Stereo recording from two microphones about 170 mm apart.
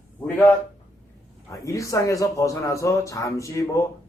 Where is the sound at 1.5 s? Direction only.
20° left (ahead or behind).